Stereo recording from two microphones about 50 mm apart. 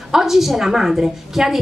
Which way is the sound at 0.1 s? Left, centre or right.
Centre.